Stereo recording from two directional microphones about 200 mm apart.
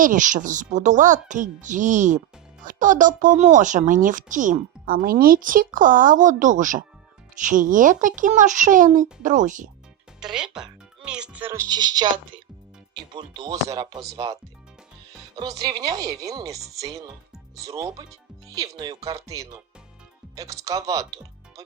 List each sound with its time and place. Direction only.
0.0 s speech: 40° right (ahead or behind)
10.2 s speech: 5° right (ahead or behind)
15.4 s speech: 20° right (ahead or behind)